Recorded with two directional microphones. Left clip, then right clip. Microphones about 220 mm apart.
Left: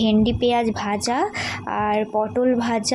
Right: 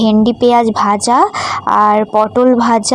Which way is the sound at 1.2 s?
10° right (ahead or behind).